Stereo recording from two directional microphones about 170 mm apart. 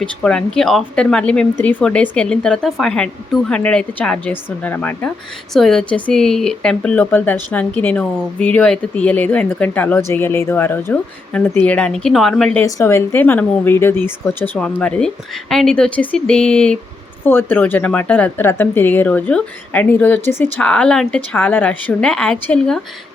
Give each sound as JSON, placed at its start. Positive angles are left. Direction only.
{"t": 0.0, "sound": "a woman's voice", "side_deg": 5}
{"t": 12.6, "sound": "a woman's voice", "side_deg": 15}